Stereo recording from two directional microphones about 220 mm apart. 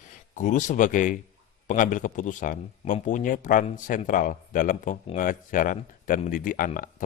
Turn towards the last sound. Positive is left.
turn(degrees=40)  # may be behind; listen again after turning